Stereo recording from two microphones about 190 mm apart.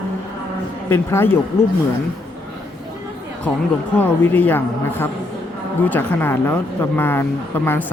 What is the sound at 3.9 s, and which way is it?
A woman's voice, 10° left (ahead or behind).